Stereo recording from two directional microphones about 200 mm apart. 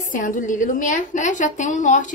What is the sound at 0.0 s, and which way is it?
A woman's voice, 40° left (ahead or behind).